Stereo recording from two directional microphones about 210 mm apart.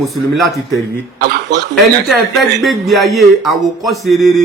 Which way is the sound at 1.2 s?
55° right (ahead or behind).